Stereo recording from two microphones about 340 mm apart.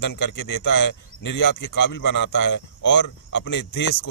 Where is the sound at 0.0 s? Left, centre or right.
Left.